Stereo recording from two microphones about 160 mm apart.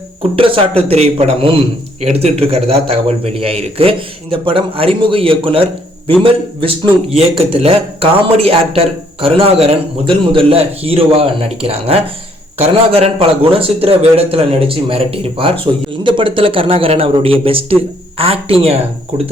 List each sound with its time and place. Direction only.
0.2 s a man's voice: 35° right (ahead or behind)